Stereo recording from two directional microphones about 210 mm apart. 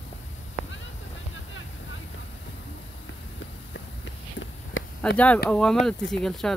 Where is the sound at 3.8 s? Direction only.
65° left (ahead or behind).